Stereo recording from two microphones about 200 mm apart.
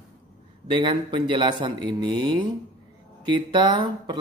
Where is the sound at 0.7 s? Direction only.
25° right (ahead or behind).